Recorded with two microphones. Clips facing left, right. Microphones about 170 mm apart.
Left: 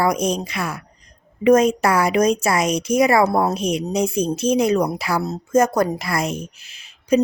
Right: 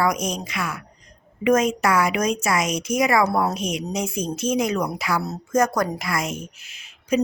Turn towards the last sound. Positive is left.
turn(degrees=35)  # may be behind; listen again after turning